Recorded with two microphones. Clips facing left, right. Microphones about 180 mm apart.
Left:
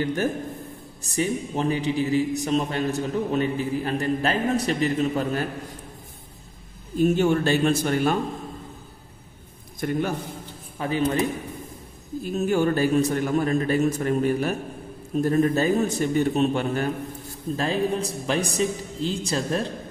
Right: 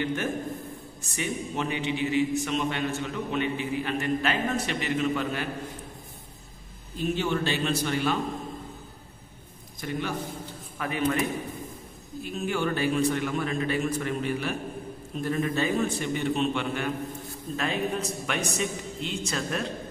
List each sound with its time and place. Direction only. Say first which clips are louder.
0.0 s a man's voice: left 4 dB; 40° left (ahead or behind)
7.0 s a man's voice: left 7 dB; 45° left (ahead or behind)
9.8 s a man's voice: left 6 dB; 50° left (ahead or behind)
10.8 s a man's voice: left 4 dB; 30° left (ahead or behind)